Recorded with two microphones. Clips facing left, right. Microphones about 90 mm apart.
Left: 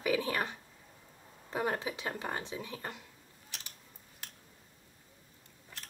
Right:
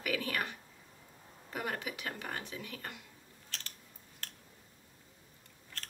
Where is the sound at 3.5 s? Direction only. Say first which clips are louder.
Right 2 dB; 15° left (ahead or behind).